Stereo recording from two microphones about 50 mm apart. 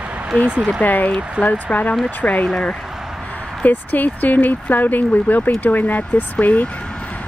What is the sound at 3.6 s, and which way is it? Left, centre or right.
Speech, left.